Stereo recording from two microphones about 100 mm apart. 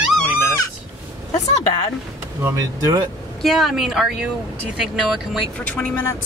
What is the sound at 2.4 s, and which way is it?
Speech, 35° right (ahead or behind).